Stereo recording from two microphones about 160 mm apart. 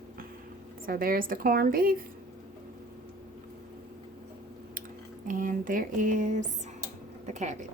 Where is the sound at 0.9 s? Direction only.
65° right (ahead or behind).